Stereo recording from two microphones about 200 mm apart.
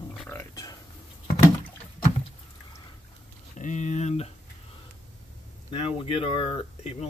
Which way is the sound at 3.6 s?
35° left (ahead or behind).